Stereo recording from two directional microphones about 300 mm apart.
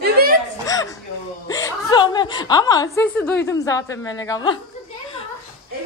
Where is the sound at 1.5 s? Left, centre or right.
Centre.